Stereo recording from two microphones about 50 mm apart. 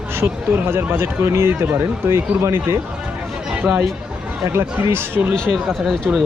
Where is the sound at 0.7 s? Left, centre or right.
Right.